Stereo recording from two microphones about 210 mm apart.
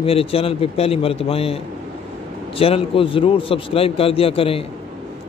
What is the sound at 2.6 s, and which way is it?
A man's voice, 25° left (ahead or behind).